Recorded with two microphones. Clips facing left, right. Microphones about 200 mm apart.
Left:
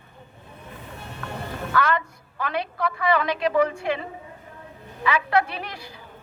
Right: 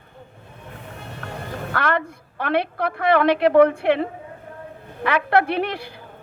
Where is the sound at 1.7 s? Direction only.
60° right (ahead or behind).